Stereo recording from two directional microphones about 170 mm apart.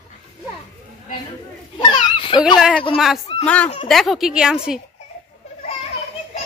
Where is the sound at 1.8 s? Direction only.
30° left (ahead or behind).